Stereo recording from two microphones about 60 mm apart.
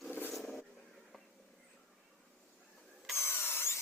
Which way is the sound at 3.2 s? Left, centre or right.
Left.